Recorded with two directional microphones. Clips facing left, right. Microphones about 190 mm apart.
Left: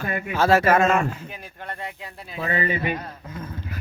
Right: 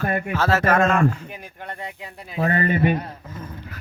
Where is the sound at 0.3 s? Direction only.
15° left (ahead or behind).